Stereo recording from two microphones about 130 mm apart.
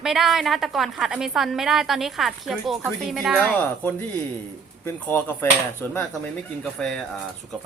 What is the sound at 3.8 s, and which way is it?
Speech, 15° left (ahead or behind).